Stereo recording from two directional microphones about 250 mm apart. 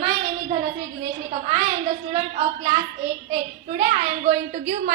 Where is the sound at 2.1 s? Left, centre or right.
Right.